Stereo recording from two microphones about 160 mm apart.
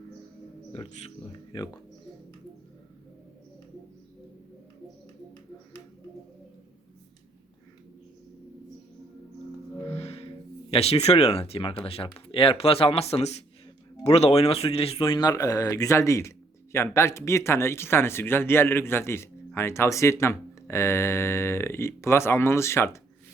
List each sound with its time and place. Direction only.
0.7 s speech: 40° left (ahead or behind)
1.5 s speech: 25° left (ahead or behind)
9.9 s music: 40° left (ahead or behind)
10.7 s speech: 40° left (ahead or behind); by 23.0 s 15° left (ahead or behind)